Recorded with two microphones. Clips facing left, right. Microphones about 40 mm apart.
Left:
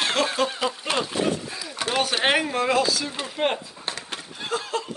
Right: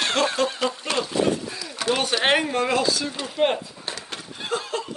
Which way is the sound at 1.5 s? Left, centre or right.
Centre.